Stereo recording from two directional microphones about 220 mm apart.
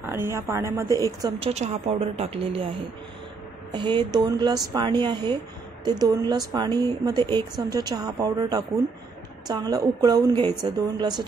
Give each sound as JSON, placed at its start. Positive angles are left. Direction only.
{"t": 0.0, "sound": "a woman's voice", "side_deg": -10}
{"t": 0.8, "sound": "speech", "side_deg": 15}
{"t": 1.2, "sound": "speech", "side_deg": -25}
{"t": 3.7, "sound": "a woman's voice", "side_deg": -20}